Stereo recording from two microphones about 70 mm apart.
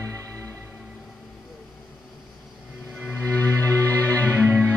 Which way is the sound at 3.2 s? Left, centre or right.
Left.